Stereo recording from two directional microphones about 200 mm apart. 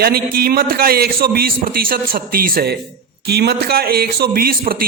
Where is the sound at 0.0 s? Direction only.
50° right (ahead or behind).